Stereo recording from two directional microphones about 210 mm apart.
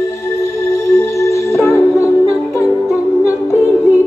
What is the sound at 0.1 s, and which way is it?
Music, 15° left (ahead or behind).